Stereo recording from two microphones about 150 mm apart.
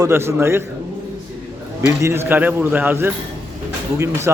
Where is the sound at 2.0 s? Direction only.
15° right (ahead or behind).